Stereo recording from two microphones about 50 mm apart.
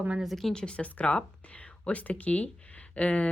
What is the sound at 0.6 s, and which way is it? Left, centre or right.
Speech, left.